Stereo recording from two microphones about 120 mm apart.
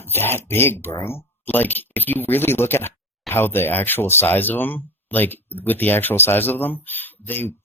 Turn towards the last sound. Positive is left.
turn(degrees=15)  # may be behind; listen again after turning